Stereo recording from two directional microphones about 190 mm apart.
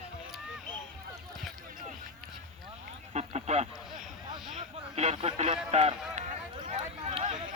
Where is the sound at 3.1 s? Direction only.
35° right (ahead or behind).